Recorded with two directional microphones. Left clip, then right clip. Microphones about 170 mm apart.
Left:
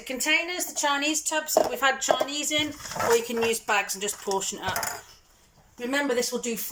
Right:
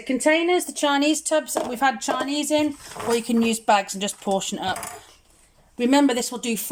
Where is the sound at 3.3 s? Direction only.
65° right (ahead or behind).